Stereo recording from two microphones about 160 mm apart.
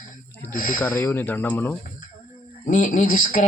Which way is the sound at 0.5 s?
55° left (ahead or behind).